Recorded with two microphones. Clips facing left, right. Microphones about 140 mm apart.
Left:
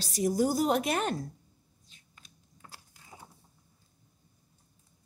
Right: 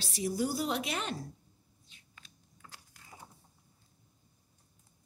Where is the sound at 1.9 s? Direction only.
40° left (ahead or behind).